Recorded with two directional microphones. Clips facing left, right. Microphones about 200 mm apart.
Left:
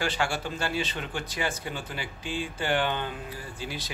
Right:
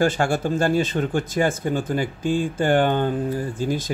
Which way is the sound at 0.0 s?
50° right (ahead or behind).